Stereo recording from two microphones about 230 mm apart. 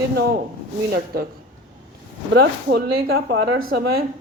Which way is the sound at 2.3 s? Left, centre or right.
Right.